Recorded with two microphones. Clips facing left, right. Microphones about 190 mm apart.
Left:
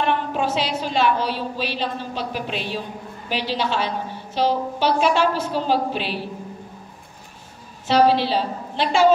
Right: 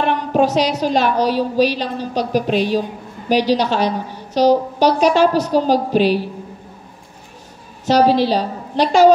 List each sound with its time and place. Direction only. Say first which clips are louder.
0.3 s a woman's voice: right 8 dB; 40° right (ahead or behind)
7.8 s a woman's voice: right 4 dB; 40° right (ahead or behind)